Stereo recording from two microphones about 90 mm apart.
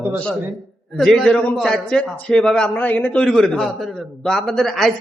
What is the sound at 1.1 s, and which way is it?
A man's voice, 5° left (ahead or behind).